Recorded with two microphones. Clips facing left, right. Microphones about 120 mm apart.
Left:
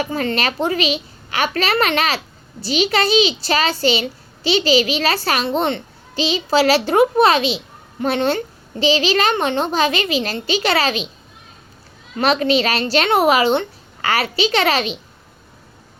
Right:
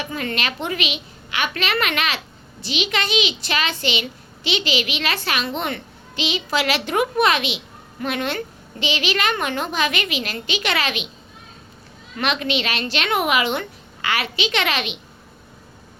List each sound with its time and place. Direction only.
0.0 s a woman's voice: 35° left (ahead or behind)
12.1 s a woman's voice: 35° left (ahead or behind)